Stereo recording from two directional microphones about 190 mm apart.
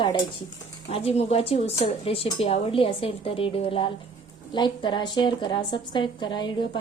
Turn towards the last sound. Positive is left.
turn(degrees=25)  # may be behind; listen again after turning